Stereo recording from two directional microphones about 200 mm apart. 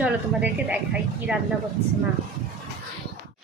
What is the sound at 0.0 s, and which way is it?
Speech, 5° right (ahead or behind).